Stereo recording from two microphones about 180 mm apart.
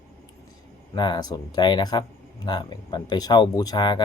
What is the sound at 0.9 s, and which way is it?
Speech, 25° left (ahead or behind).